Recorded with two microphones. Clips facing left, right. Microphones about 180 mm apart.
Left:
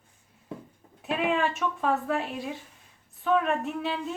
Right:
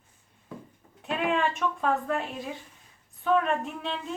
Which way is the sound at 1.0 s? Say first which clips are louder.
Left 1 dB; 5° left (ahead or behind).